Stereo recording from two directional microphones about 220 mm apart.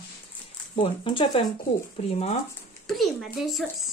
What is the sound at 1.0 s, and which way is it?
Speech, 25° left (ahead or behind).